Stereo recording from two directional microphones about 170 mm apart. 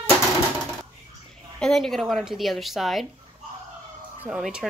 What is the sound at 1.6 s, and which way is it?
Speech, centre (ahead or behind).